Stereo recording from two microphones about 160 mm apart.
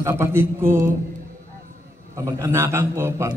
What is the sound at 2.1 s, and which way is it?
A man's voice, 20° right (ahead or behind).